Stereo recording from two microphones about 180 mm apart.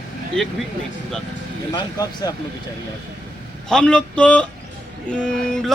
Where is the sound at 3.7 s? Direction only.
5° left (ahead or behind).